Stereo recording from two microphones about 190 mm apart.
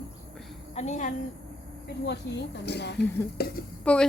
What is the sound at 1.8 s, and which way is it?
Speech, 65° left (ahead or behind).